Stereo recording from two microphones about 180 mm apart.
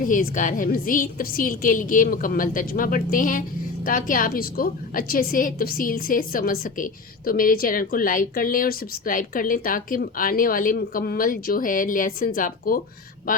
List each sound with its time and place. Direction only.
0.0 s a woman's voice: 50° left (ahead or behind)